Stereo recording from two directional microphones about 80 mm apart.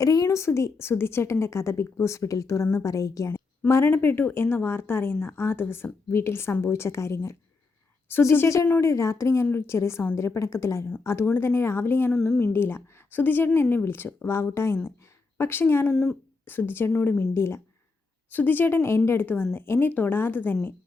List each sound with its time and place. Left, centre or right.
0.0 s a woman's voice: left
15.9 s speech: centre
16.5 s a woman's voice: left